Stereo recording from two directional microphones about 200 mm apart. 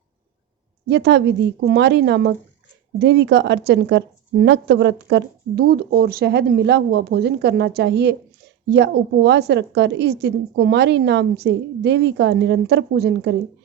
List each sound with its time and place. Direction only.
0.9 s a woman's voice: 60° right (ahead or behind)